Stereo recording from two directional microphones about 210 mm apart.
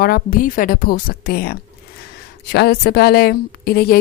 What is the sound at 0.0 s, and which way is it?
A woman's voice, 45° left (ahead or behind).